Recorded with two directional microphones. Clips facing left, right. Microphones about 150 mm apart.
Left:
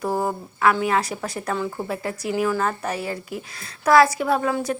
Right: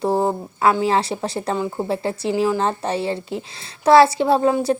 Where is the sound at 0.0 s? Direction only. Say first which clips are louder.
Right 5 dB; 25° right (ahead or behind).